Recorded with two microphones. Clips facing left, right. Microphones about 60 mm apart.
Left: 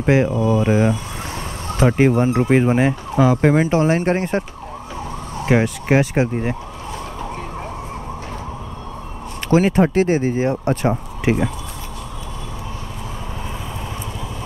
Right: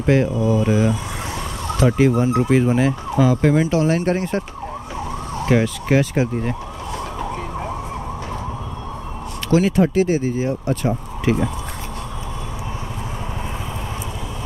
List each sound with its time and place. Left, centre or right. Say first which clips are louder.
0.0 s speech: left 1 dB; left
5.4 s speech: left 1 dB; left
9.5 s speech: left 1 dB; left